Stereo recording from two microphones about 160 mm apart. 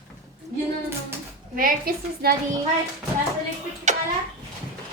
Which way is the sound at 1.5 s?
65° right (ahead or behind).